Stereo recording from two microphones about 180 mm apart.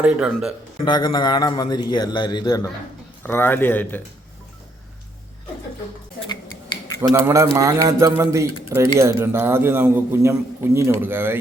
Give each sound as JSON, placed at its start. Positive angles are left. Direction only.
{"t": 0.0, "sound": "a man's voice", "side_deg": -5}
{"t": 0.9, "sound": "a man's voice", "side_deg": 25}
{"t": 7.1, "sound": "a man's voice", "side_deg": -15}